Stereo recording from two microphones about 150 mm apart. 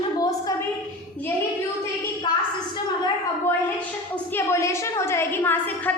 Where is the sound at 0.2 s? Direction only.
25° left (ahead or behind).